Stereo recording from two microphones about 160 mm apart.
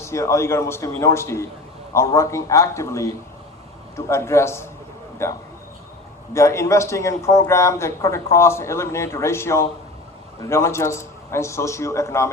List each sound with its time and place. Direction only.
0.0 s a man's voice: 15° left (ahead or behind)